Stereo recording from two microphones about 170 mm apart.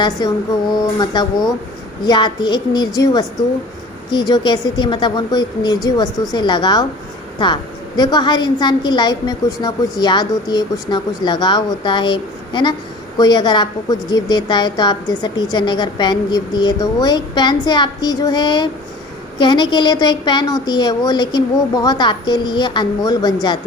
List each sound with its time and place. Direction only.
0.0 s a woman's voice: 20° left (ahead or behind)